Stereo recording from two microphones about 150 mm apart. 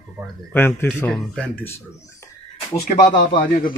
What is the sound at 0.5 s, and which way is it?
Speech, 15° left (ahead or behind).